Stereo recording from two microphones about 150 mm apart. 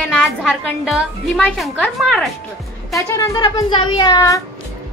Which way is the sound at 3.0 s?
20° left (ahead or behind).